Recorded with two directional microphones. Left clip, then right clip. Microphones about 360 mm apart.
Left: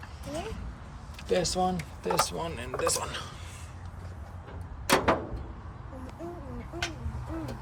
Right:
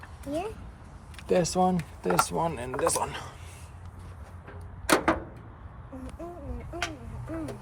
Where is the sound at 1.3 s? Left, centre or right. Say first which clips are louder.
Right 3 dB; centre.